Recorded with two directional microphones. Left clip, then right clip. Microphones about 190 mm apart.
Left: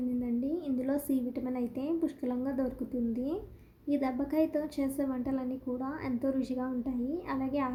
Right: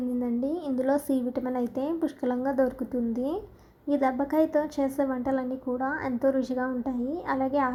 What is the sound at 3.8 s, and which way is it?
A child's voice, 20° right (ahead or behind).